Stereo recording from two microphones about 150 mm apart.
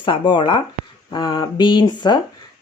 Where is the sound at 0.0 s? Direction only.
30° left (ahead or behind).